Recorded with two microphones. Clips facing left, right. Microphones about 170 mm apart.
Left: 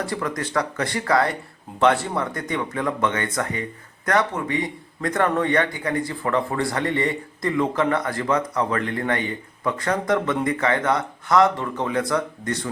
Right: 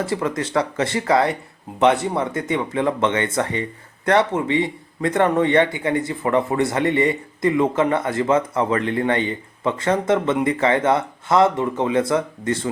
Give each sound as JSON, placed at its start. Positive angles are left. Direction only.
{"t": 0.0, "sound": "speech", "side_deg": -25}